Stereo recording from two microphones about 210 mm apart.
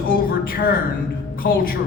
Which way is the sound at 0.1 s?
45° left (ahead or behind).